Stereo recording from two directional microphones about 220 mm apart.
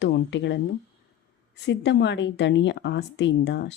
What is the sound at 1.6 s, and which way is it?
A woman's voice, 50° left (ahead or behind).